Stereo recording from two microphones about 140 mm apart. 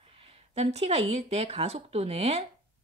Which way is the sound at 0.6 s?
50° right (ahead or behind).